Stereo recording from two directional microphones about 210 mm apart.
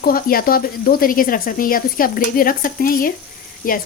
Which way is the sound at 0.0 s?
45° left (ahead or behind).